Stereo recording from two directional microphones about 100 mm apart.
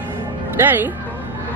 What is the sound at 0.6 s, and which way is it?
Speech, 20° right (ahead or behind).